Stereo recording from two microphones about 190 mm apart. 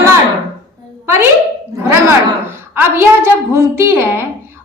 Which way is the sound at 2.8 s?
15° right (ahead or behind).